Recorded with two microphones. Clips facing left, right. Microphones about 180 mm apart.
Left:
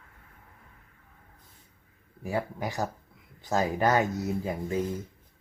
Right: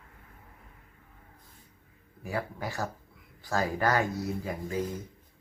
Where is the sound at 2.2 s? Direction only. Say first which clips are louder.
Left 3 dB; 20° left (ahead or behind).